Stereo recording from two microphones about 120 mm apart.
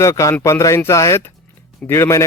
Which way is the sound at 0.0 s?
25° left (ahead or behind).